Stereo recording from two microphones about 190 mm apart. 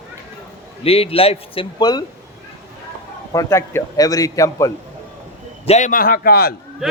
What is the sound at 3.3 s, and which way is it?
A man's voice, 15° left (ahead or behind).